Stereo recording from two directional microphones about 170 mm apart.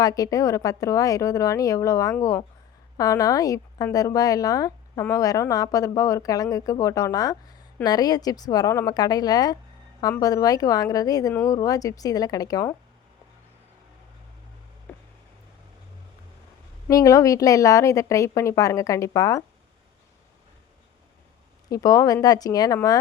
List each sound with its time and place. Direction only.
0.0 s speech: 20° left (ahead or behind)
14.9 s a sound: 10° left (ahead or behind)
16.9 s speech: 20° left (ahead or behind)
21.7 s speech: 20° left (ahead or behind)